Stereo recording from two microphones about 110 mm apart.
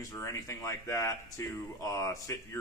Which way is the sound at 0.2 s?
25° left (ahead or behind).